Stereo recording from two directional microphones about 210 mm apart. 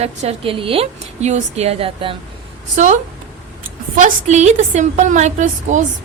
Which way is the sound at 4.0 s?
35° right (ahead or behind).